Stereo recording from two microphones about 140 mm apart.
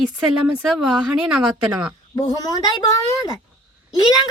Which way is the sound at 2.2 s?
25° left (ahead or behind).